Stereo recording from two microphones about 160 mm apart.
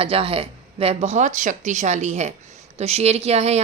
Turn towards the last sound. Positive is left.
turn(degrees=-40)  # may be behind; listen again after turning